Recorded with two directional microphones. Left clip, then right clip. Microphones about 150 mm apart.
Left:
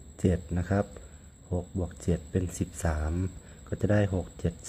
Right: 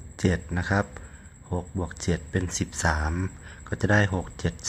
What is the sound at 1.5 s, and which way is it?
Speech, 5° left (ahead or behind).